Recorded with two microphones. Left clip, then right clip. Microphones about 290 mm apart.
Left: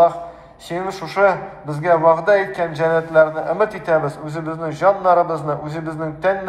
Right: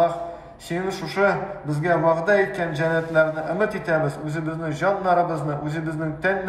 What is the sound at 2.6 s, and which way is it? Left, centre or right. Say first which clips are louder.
A man's voice: left 5 dB; centre.